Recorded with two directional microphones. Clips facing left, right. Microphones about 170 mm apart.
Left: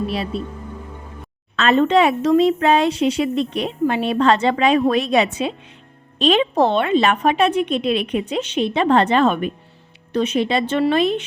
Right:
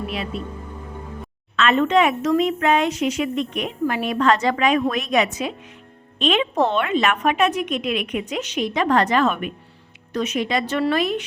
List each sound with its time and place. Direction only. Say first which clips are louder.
0.1 s a woman's voice: left 4 dB; 35° left (ahead or behind)
1.5 s a woman's voice: left 2 dB; 35° left (ahead or behind)